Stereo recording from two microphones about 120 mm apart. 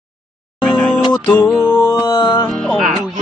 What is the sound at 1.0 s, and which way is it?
Music, 35° left (ahead or behind).